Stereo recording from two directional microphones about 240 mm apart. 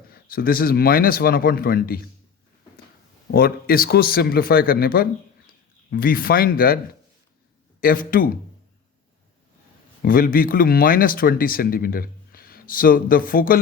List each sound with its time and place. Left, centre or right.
0.1 s speech: left
3.3 s speech: left
7.8 s speech: left
10.0 s speech: left